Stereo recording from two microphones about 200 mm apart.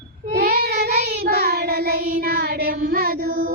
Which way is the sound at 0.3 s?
50° right (ahead or behind).